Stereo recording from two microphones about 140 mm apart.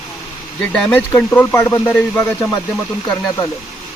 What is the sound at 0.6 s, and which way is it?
Speech, 5° left (ahead or behind).